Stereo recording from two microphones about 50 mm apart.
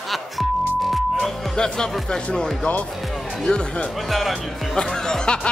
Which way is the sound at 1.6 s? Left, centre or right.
Centre.